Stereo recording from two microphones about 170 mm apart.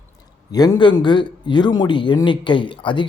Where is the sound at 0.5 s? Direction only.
25° left (ahead or behind).